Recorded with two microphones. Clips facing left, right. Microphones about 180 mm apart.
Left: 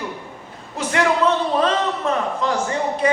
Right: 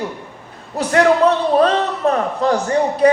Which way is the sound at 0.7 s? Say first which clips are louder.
Right 6 dB; 40° right (ahead or behind).